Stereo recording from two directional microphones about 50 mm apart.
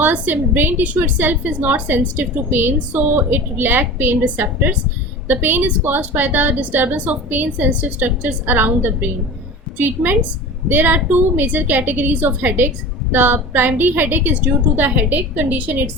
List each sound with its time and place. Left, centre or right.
0.1 s a woman's voice: right